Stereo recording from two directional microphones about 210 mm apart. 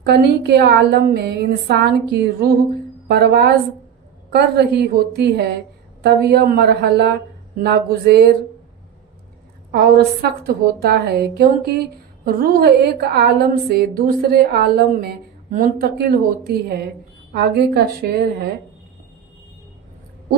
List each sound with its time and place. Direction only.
0.0 s a woman's voice: 50° right (ahead or behind)
9.7 s a woman's voice: 50° right (ahead or behind)